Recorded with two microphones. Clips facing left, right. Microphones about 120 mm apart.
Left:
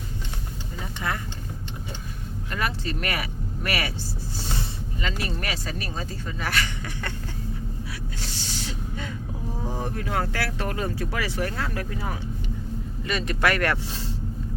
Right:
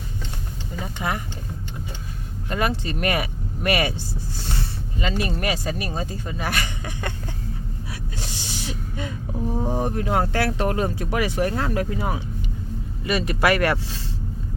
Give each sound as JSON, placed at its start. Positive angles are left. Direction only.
{"t": 1.0, "sound": "speech", "side_deg": -15}
{"t": 2.5, "sound": "vehicle", "side_deg": -20}
{"t": 4.9, "sound": "speech", "side_deg": -20}
{"t": 8.2, "sound": "gasp", "side_deg": -15}
{"t": 9.6, "sound": "speech", "side_deg": -20}